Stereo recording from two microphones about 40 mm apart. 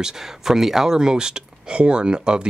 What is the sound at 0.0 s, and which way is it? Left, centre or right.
Speech, centre.